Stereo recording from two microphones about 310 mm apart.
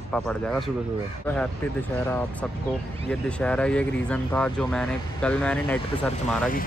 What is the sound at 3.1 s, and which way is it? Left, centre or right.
Speech, centre.